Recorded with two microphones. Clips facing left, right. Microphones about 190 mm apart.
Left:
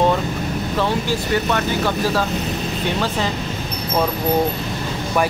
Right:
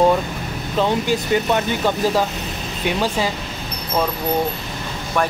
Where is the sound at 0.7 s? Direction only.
15° right (ahead or behind).